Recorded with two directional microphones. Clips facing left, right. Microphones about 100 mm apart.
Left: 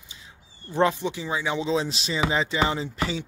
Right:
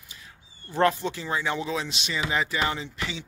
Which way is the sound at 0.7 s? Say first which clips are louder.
Left 1 dB; 15° left (ahead or behind).